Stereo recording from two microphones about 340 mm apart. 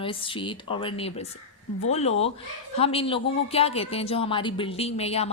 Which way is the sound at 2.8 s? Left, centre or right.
Centre.